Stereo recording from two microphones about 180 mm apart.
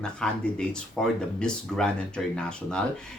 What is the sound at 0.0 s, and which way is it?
Speech, 5° left (ahead or behind).